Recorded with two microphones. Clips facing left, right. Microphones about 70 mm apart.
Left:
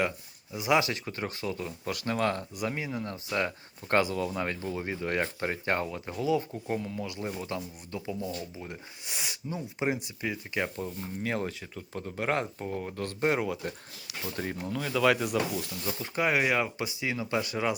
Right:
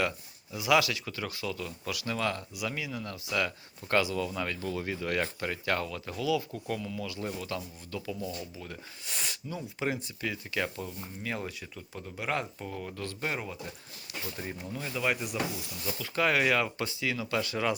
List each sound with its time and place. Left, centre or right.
0.5 s speech: left
9.1 s speech: centre
9.5 s speech: left
11.2 s speech: left
13.4 s rub: left
14.3 s speech: left
15.3 s rub: left
16.1 s speech: centre